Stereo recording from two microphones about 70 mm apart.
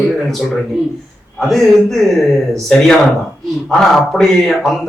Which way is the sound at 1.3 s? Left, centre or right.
Centre.